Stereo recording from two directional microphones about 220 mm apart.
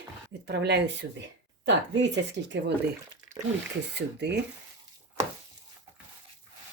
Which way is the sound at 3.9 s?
50° right (ahead or behind).